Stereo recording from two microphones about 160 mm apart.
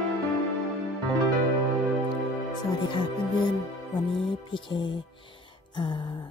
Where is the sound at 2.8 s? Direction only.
30° left (ahead or behind).